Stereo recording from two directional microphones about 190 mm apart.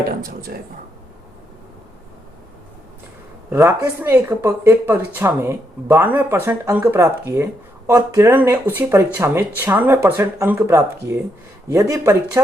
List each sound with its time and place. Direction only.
0.1 s speech: 55° right (ahead or behind)
3.5 s speech: 15° right (ahead or behind)